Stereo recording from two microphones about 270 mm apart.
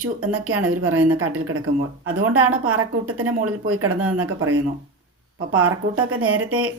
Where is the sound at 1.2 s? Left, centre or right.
Right.